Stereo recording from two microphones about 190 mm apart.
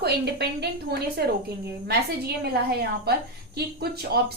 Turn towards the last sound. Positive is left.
turn(degrees=-55)  # may be behind; listen again after turning